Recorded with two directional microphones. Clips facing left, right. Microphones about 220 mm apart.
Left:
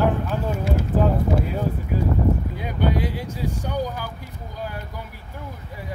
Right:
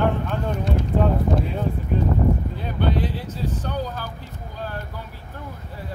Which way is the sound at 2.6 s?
10° left (ahead or behind).